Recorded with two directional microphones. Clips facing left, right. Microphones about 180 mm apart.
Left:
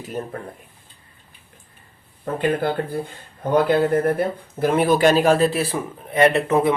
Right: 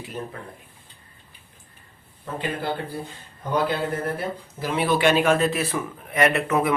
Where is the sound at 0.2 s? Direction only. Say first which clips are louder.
Left 4 dB; 45° left (ahead or behind).